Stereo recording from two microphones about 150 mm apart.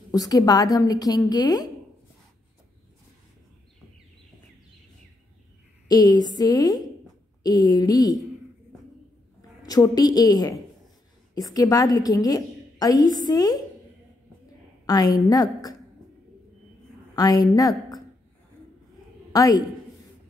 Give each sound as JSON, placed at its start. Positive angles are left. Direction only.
{"t": 0.1, "sound": "a woman's voice", "side_deg": 25}
{"t": 5.9, "sound": "a woman's voice", "side_deg": 25}
{"t": 9.6, "sound": "a woman's voice", "side_deg": 25}
{"t": 14.9, "sound": "a woman's voice", "side_deg": 25}
{"t": 17.1, "sound": "a woman's voice", "side_deg": 25}
{"t": 19.3, "sound": "a man's voice", "side_deg": 25}